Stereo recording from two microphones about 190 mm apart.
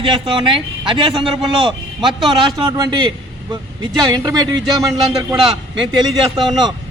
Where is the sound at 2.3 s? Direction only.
20° right (ahead or behind).